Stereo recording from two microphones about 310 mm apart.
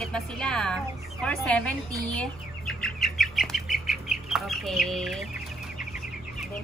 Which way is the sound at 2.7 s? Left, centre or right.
Centre.